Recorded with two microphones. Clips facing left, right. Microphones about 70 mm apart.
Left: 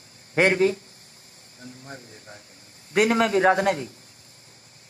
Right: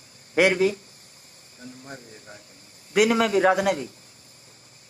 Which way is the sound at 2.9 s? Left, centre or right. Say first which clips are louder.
Even; left.